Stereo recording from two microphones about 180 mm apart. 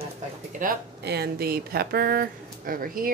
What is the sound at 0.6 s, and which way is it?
Speech, 65° right (ahead or behind).